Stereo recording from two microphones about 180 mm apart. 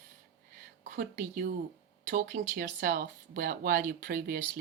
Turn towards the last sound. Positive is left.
turn(degrees=-55)  # may be behind; listen again after turning